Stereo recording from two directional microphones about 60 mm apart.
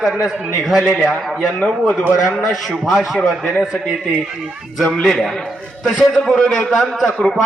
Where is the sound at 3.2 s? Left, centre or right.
Centre.